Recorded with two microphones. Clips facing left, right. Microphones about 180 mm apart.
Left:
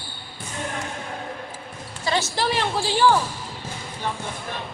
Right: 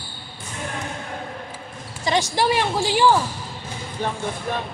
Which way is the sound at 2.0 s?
15° right (ahead or behind).